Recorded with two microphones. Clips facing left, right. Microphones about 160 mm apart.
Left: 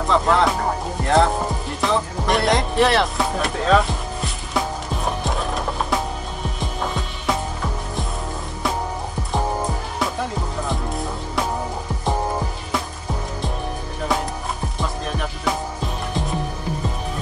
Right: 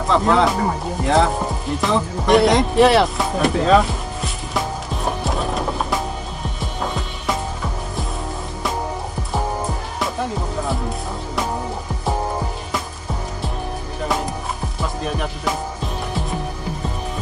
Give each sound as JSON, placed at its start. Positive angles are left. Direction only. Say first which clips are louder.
{"t": 0.0, "sound": "speech", "louder": "right 2 dB", "side_deg": 0}
{"t": 5.2, "sound": "music", "louder": "right 2 dB", "side_deg": 0}
{"t": 14.8, "sound": "music", "louder": "right 3 dB", "side_deg": 0}